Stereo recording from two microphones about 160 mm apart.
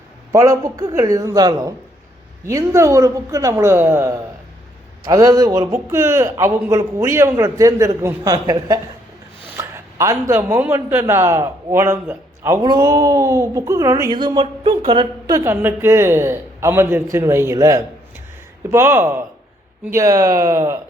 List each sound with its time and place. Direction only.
0.3 s a man's voice: 20° right (ahead or behind)
15.4 s a man's voice: 15° right (ahead or behind)